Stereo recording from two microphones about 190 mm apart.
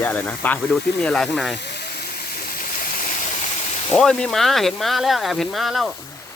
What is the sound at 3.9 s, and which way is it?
Speech, 5° left (ahead or behind).